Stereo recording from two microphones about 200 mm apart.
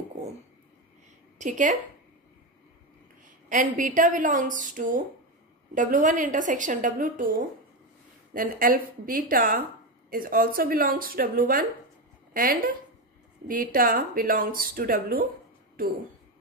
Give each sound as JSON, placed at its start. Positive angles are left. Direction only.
{"t": 1.4, "sound": "a woman's voice", "side_deg": -40}
{"t": 3.4, "sound": "a woman's voice", "side_deg": -40}
{"t": 13.5, "sound": "speech", "side_deg": -45}